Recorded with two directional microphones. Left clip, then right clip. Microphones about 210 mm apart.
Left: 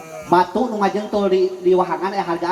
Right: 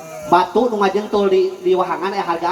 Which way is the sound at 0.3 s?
20° left (ahead or behind).